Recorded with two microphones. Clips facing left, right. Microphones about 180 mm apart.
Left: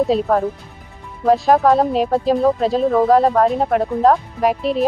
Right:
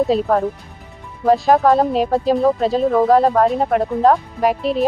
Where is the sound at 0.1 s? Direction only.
Centre (ahead or behind).